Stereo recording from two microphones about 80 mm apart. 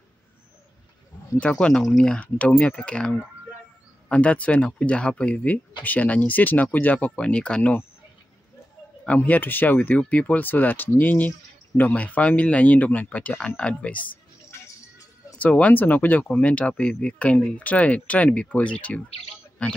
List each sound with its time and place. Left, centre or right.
1.4 s speech: centre
9.0 s speech: centre
15.3 s speech: centre